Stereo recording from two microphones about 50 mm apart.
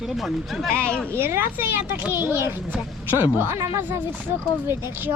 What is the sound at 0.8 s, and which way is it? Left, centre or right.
Speech, centre.